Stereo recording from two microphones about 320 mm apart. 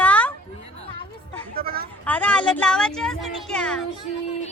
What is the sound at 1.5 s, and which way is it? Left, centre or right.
Speech, right.